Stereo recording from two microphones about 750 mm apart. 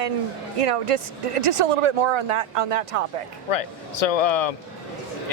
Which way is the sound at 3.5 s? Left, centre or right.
Left.